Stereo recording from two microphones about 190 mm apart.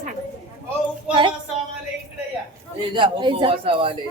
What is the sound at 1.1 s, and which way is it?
Speech, 25° right (ahead or behind).